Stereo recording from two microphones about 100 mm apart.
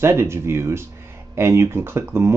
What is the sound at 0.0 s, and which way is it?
Speech, 25° right (ahead or behind).